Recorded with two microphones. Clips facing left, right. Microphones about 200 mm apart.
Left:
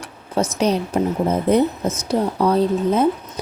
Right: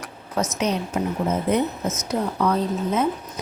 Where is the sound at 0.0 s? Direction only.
30° left (ahead or behind).